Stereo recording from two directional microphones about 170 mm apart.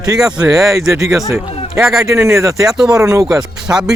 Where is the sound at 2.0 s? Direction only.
15° right (ahead or behind).